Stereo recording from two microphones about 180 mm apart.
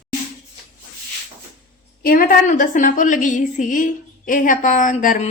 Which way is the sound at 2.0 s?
50° left (ahead or behind).